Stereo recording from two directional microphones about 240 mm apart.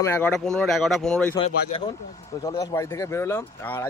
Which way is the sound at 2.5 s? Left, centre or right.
Centre.